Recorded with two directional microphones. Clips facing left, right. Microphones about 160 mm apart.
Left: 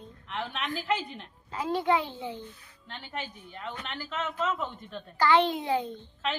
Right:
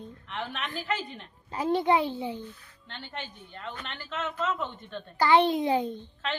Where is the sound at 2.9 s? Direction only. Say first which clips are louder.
Left 2 dB; 5° left (ahead or behind).